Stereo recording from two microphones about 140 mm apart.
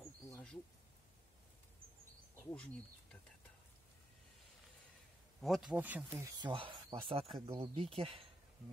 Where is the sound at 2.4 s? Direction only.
10° left (ahead or behind).